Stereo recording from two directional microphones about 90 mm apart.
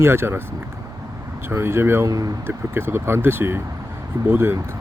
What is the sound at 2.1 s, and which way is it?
Speech, 45° right (ahead or behind).